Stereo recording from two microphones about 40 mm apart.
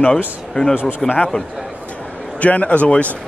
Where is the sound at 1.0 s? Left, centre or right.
Left.